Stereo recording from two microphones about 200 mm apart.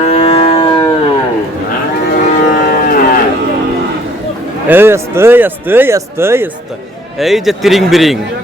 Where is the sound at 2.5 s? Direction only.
45° left (ahead or behind).